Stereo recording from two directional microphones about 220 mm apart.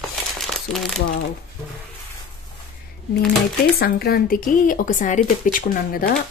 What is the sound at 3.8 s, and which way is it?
Speech, 45° left (ahead or behind).